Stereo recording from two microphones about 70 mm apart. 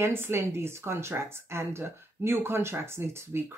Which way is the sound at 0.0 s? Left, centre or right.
Right.